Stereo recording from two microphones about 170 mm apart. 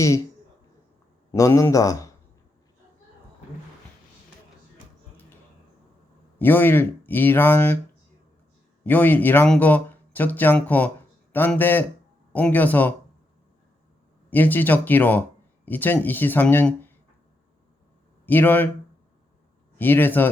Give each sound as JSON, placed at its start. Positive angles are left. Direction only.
{"t": 1.3, "sound": "a man's voice", "side_deg": 20}
{"t": 6.4, "sound": "speech", "side_deg": 10}
{"t": 8.8, "sound": "speech", "side_deg": 10}
{"t": 14.3, "sound": "speech", "side_deg": 10}
{"t": 18.3, "sound": "speech", "side_deg": 10}
{"t": 19.8, "sound": "speech", "side_deg": 10}